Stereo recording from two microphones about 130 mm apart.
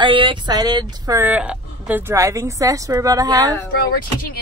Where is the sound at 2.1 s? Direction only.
25° right (ahead or behind).